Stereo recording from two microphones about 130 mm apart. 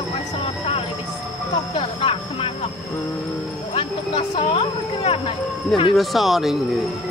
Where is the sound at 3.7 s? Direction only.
50° left (ahead or behind).